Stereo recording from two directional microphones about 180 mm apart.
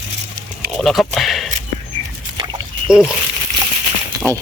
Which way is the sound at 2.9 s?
5° right (ahead or behind).